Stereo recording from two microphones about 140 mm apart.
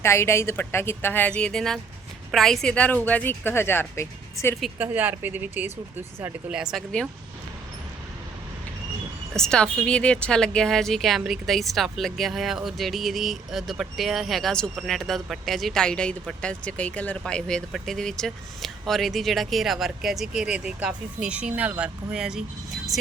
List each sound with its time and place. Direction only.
0.0 s speech: 20° left (ahead or behind)
4.8 s speech: 15° right (ahead or behind)
9.3 s speech: 5° left (ahead or behind)